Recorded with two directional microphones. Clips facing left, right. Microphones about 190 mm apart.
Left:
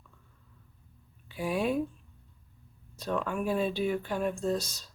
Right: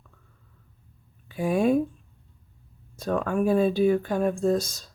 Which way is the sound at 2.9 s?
45° right (ahead or behind).